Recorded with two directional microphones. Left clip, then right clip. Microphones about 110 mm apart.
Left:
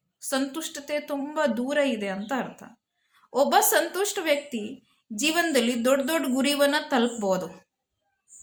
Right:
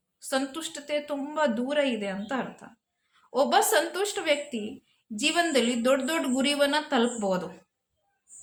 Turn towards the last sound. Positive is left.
turn(degrees=35)  # may be behind; listen again after turning